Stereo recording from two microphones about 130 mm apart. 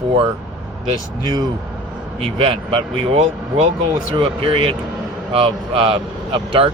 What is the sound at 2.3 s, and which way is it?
A man's voice, 45° right (ahead or behind).